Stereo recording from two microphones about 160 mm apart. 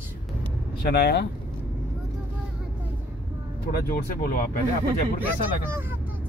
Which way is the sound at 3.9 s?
70° left (ahead or behind).